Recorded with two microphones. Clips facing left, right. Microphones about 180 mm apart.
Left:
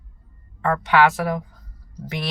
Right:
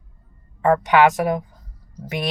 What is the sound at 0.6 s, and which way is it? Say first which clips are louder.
Speech: right 3 dB; 15° right (ahead or behind).